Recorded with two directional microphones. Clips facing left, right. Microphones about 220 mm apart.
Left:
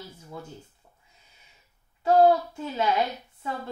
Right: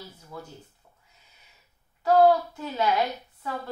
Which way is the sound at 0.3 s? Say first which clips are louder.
Even; 20° left (ahead or behind).